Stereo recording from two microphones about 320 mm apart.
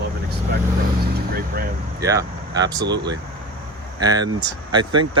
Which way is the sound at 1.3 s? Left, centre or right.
Right.